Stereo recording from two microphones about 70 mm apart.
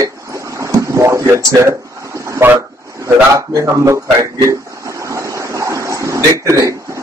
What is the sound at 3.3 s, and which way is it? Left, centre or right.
Speech, right.